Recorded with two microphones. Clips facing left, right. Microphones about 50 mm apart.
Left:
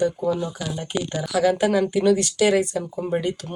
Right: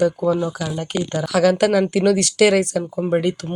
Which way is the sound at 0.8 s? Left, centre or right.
Right.